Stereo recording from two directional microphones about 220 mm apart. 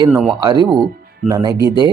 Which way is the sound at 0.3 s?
20° right (ahead or behind).